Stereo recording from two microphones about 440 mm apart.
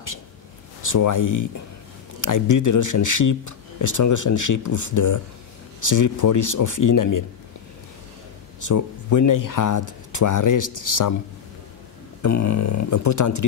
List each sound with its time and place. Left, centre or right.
0.8 s speech: left
8.5 s speech: left
12.2 s speech: left